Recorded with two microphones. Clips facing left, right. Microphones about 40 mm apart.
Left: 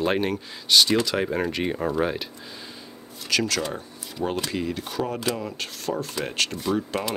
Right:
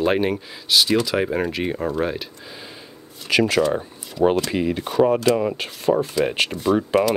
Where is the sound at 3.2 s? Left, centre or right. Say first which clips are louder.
Right 7 dB; right.